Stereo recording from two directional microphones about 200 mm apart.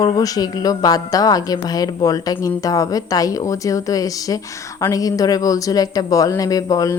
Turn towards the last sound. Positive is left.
turn(degrees=15)  # may be behind; listen again after turning